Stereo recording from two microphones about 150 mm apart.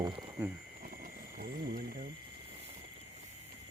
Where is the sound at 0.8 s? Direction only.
70° right (ahead or behind).